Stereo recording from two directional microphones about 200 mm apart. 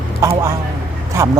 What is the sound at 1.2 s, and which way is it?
Speech, 15° right (ahead or behind).